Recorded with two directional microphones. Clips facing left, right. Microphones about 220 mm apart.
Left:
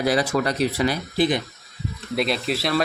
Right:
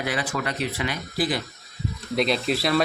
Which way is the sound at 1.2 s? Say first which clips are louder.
Left 4 dB; 20° left (ahead or behind).